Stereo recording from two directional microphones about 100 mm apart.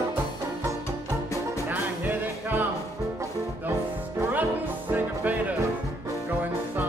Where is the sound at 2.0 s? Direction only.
20° right (ahead or behind).